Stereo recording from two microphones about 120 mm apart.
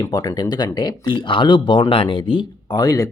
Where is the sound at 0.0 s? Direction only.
30° left (ahead or behind).